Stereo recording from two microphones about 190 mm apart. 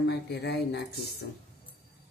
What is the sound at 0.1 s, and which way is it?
Speech, 60° left (ahead or behind).